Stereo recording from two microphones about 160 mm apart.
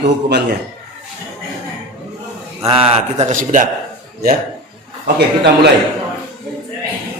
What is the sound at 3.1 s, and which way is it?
Speech, 50° right (ahead or behind).